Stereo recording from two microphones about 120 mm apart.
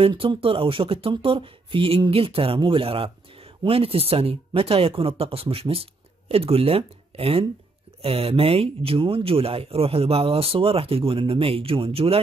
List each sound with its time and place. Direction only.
0.0 s speech: 45° right (ahead or behind)